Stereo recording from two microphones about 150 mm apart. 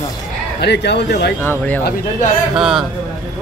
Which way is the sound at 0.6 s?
90° left.